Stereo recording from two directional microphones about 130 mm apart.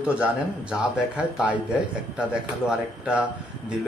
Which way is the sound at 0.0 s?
10° right (ahead or behind).